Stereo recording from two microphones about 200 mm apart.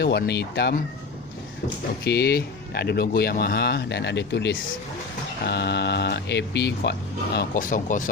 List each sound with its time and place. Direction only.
0.0 s speech: 55° left (ahead or behind)
2.0 s speech: 55° left (ahead or behind)
7.3 s speech: 45° left (ahead or behind)